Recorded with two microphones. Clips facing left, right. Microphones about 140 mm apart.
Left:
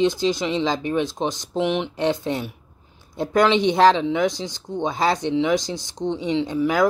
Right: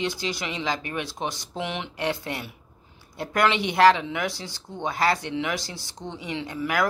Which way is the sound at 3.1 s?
20° left (ahead or behind).